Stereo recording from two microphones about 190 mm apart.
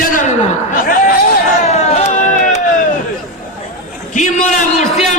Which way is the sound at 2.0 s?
40° left (ahead or behind).